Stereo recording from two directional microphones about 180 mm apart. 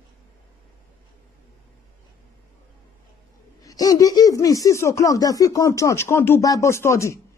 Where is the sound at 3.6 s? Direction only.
20° left (ahead or behind).